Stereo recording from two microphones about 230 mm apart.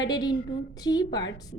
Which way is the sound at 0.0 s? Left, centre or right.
Centre.